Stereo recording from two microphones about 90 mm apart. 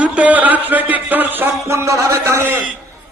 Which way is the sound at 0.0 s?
15° right (ahead or behind).